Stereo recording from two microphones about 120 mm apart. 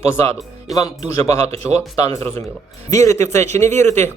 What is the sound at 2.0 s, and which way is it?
Speech, 25° left (ahead or behind).